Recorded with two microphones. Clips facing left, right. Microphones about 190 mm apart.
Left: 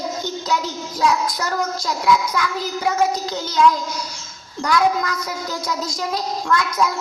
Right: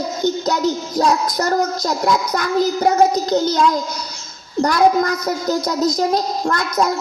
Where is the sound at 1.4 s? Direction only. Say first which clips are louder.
Right 6 dB; 40° right (ahead or behind).